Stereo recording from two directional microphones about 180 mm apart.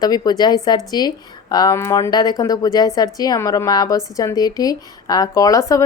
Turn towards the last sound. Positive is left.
turn(degrees=15)  # may be behind; listen again after turning